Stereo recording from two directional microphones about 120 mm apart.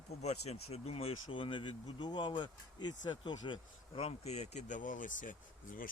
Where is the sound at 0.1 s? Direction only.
65° left (ahead or behind); by 5.4 s 90° left.